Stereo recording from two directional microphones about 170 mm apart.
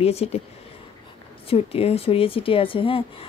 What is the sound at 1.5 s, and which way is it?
Speech, 35° left (ahead or behind).